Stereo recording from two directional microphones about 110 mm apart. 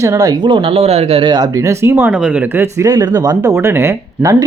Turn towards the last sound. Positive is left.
turn(degrees=-30)  # may be behind; listen again after turning